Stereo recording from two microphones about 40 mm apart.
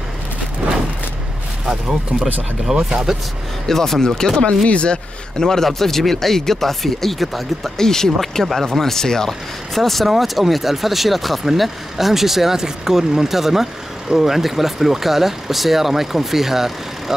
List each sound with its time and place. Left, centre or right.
1.7 s speech: centre
3.6 s a man's voice: centre; by 5.5 s left
5.5 s speech: centre
9.8 s speech: centre